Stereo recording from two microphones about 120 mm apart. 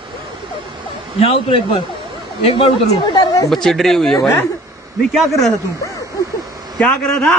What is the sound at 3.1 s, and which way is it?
Speech, 35° left (ahead or behind).